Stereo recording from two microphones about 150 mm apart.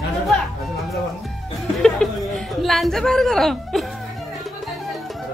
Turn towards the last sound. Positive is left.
turn(degrees=0)  # may be behind; listen again after turning